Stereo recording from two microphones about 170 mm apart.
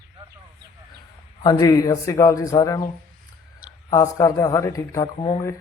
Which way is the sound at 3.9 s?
20° left (ahead or behind).